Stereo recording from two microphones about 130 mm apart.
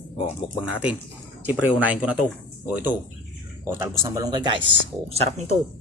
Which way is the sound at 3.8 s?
30° right (ahead or behind).